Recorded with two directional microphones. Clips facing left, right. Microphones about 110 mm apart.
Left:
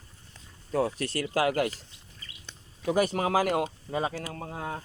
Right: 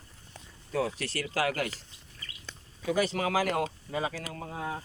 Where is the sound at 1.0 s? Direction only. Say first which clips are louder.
Left 4 dB; 25° left (ahead or behind).